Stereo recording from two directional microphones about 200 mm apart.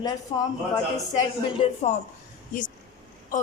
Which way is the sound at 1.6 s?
35° left (ahead or behind).